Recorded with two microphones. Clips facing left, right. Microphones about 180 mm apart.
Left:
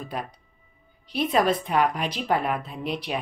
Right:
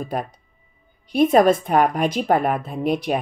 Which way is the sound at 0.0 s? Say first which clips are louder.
Right 6 dB; 45° right (ahead or behind).